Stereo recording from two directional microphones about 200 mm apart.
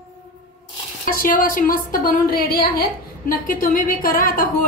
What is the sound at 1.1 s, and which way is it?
A woman's voice, 45° left (ahead or behind).